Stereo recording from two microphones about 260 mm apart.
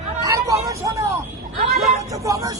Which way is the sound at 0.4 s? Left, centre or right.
Centre.